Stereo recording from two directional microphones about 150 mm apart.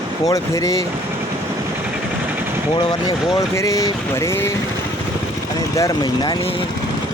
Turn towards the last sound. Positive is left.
turn(degrees=30)  # may be behind; listen again after turning